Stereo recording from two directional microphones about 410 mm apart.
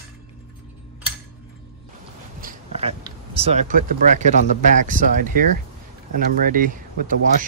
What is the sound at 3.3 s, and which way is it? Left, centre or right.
Speech, centre.